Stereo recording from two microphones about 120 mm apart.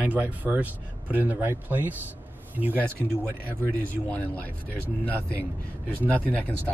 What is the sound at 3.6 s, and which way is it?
Speech, 15° left (ahead or behind).